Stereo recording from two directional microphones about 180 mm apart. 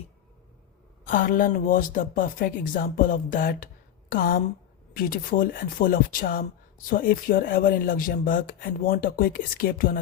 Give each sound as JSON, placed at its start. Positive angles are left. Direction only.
{"t": 1.0, "sound": "speech", "side_deg": 50}